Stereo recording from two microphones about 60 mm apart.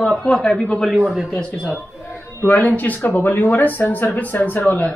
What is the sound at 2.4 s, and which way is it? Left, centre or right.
Speech, left.